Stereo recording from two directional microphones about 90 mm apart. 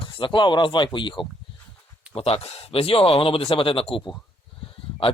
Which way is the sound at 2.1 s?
90° left.